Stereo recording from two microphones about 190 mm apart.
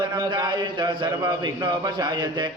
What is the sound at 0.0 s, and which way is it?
A man's voice, 25° right (ahead or behind).